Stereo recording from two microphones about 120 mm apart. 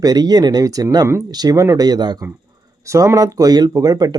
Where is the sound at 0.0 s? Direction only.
35° right (ahead or behind).